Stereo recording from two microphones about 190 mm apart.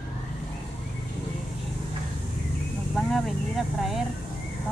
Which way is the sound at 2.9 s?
Centre (ahead or behind).